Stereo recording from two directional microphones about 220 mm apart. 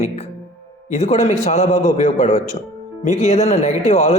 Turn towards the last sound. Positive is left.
turn(degrees=30)  # may be behind; listen again after turning